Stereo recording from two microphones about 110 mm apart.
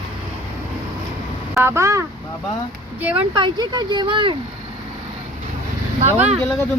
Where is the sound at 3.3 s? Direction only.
45° right (ahead or behind).